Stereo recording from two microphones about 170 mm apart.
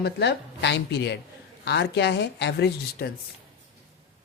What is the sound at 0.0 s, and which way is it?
A woman's voice, 80° left.